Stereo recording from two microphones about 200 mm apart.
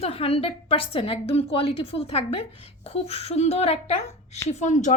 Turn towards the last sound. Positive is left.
turn(degrees=40)  # may be behind; listen again after turning